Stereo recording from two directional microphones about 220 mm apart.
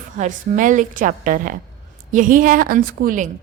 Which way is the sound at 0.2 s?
35° right (ahead or behind).